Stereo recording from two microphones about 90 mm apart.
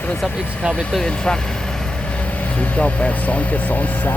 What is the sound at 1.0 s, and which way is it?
Speech, 10° left (ahead or behind).